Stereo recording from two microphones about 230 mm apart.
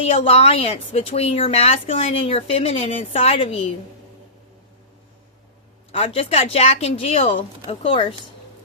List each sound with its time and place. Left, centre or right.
0.3 s a woman's voice: left
5.9 s a woman's voice: left